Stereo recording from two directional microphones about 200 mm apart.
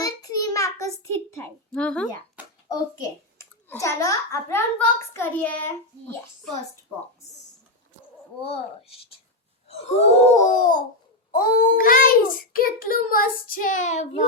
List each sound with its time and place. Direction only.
0.0 s a sound: 20° left (ahead or behind)
3.3 s a child's voice: 15° left (ahead or behind)
8.4 s a child's voice: 30° left (ahead or behind)